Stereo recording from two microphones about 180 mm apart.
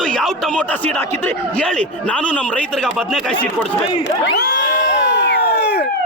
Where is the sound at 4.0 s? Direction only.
70° left (ahead or behind).